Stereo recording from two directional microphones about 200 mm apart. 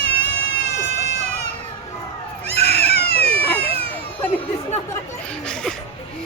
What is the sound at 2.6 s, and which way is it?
Cat, 55° left (ahead or behind).